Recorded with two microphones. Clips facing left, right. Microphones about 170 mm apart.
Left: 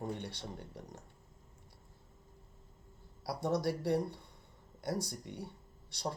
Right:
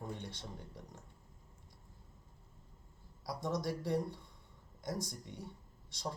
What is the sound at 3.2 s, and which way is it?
Speech, 65° left (ahead or behind).